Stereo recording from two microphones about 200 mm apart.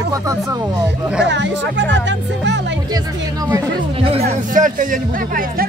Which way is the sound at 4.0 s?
30° right (ahead or behind).